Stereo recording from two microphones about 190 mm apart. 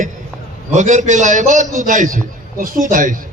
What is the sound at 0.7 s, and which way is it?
A man's voice, 40° right (ahead or behind).